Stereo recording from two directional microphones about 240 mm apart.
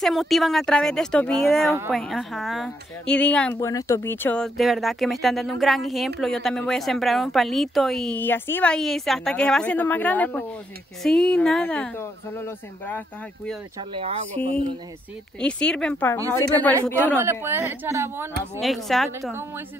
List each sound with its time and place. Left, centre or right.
0.0 s speech: centre
13.7 s speech: right
15.4 s a woman's voice: centre
17.2 s speech: centre
18.9 s speech: centre